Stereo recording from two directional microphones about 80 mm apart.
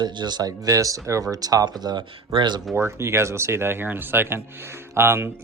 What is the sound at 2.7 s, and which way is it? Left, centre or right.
Speech, right.